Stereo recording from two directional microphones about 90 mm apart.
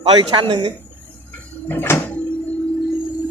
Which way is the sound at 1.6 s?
25° left (ahead or behind).